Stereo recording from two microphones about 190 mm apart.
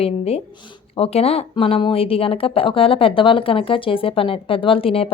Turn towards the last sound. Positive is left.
turn(degrees=30)  # may be behind; listen again after turning